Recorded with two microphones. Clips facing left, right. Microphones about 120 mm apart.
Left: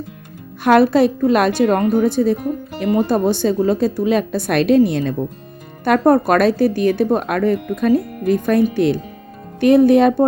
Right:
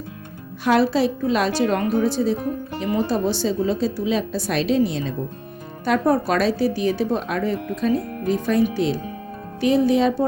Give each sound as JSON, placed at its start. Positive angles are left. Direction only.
{"t": 0.6, "sound": "a woman's voice", "side_deg": 55}